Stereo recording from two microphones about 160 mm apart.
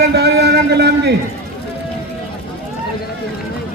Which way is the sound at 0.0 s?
90° right.